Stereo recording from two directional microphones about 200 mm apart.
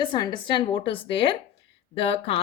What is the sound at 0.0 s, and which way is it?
Speech, 20° left (ahead or behind).